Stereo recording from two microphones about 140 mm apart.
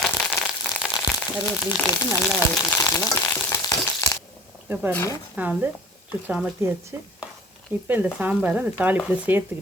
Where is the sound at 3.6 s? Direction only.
25° left (ahead or behind).